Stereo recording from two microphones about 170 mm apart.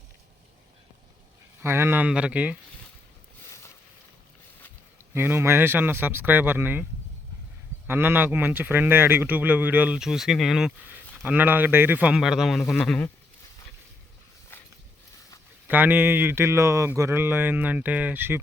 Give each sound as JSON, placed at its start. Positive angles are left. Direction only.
{"t": 1.6, "sound": "speech", "side_deg": -15}
{"t": 5.1, "sound": "speech", "side_deg": -10}
{"t": 7.9, "sound": "speech", "side_deg": -10}
{"t": 15.6, "sound": "speech", "side_deg": -10}